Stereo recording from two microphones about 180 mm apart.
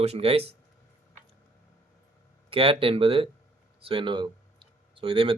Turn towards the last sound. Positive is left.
turn(degrees=-30)  # may be behind; listen again after turning